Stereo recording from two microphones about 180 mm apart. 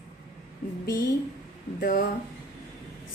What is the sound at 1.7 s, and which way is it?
Speech, 55° left (ahead or behind).